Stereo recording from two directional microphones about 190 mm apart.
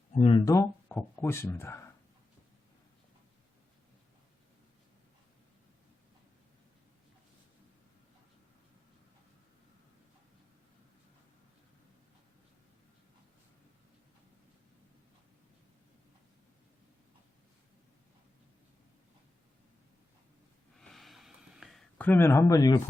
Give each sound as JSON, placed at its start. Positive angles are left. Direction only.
{"t": 0.1, "sound": "speech", "side_deg": 30}
{"t": 0.5, "sound": "speech", "side_deg": 15}
{"t": 20.7, "sound": "a sound", "side_deg": 0}